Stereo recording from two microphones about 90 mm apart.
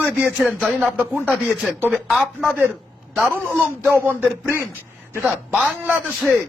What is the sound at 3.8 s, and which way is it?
Speech, 20° right (ahead or behind).